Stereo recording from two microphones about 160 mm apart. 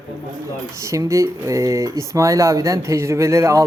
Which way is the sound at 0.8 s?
20° right (ahead or behind).